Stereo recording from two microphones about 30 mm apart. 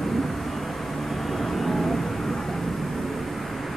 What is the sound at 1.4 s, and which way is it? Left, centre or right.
Vehicle, centre.